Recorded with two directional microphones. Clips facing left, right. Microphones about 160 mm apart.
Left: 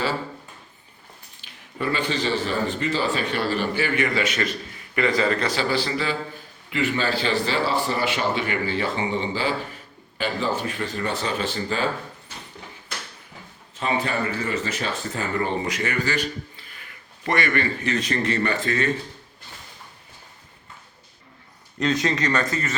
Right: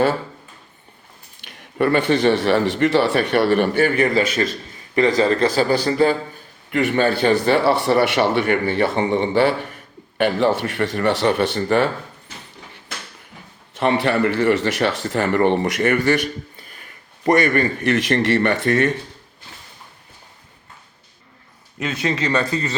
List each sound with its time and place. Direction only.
1.5 s a man's voice: 65° right (ahead or behind)
3.9 s a man's voice: 35° right (ahead or behind)
6.7 s a man's voice: 55° right (ahead or behind)
13.7 s speech: 70° right (ahead or behind); by 16.6 s 55° right (ahead or behind)
17.2 s a man's voice: 45° right (ahead or behind)
17.8 s a man's voice: 65° right (ahead or behind)
21.8 s speech: 10° right (ahead or behind)